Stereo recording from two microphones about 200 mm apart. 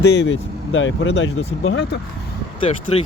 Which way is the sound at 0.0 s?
60° left (ahead or behind).